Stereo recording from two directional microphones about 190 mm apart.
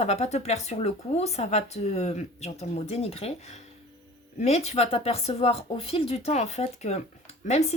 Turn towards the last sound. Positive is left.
turn(degrees=35)  # may be behind; listen again after turning